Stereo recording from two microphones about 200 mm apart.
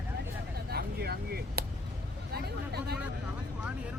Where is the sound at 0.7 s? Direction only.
50° right (ahead or behind).